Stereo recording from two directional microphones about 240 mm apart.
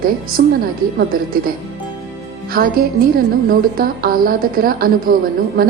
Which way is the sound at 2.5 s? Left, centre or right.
Right.